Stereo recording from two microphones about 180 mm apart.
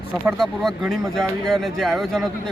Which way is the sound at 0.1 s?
10° right (ahead or behind).